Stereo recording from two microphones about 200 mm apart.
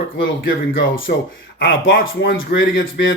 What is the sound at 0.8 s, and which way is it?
Speech, 70° left (ahead or behind).